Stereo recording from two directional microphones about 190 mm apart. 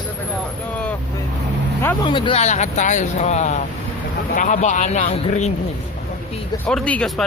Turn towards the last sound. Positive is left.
turn(degrees=5)  # may be behind; listen again after turning